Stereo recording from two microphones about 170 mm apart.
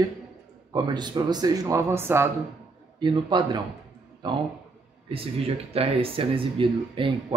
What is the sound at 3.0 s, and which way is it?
Speech, 25° right (ahead or behind).